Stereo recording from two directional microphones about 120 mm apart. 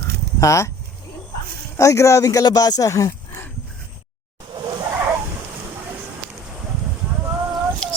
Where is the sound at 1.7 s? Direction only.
25° left (ahead or behind).